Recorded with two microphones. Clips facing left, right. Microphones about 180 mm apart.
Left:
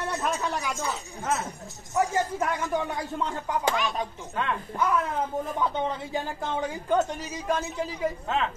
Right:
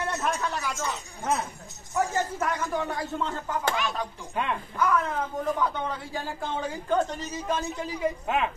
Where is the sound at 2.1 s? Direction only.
15° left (ahead or behind).